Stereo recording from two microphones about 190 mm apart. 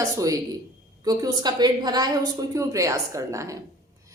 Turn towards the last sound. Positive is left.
turn(degrees=-15)  # may be behind; listen again after turning